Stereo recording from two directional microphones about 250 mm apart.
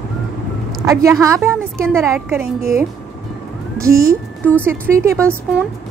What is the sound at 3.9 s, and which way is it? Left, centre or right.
Speech, right.